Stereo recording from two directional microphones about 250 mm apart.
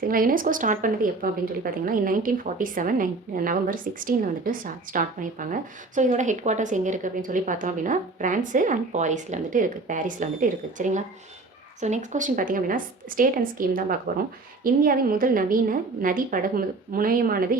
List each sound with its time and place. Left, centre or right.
0.1 s a woman's voice: right